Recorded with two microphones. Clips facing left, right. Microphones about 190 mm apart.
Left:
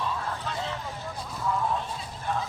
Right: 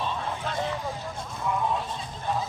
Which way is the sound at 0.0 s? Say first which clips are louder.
Right 1 dB; 25° right (ahead or behind).